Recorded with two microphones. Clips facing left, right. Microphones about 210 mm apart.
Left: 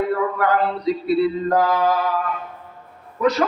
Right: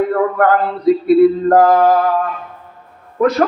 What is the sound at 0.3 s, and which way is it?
A man's voice, 55° right (ahead or behind).